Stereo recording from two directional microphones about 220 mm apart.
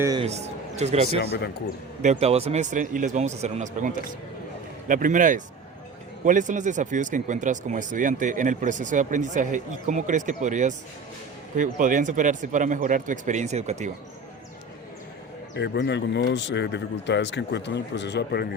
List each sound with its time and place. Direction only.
0.0 s a man's voice: 15° right (ahead or behind)
0.3 s speech: 30° right (ahead or behind)
1.2 s speech: 50° left (ahead or behind)
2.0 s speech: 30° right (ahead or behind)
15.5 s speech: 50° left (ahead or behind)